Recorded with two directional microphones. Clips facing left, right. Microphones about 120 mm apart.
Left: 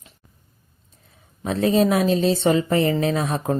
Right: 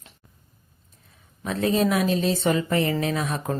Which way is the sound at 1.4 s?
30° left (ahead or behind).